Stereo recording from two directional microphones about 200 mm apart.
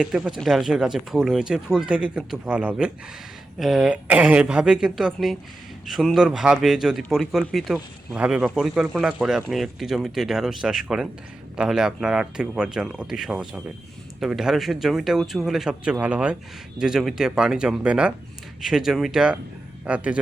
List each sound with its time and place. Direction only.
0.0 s a man's voice: centre (ahead or behind)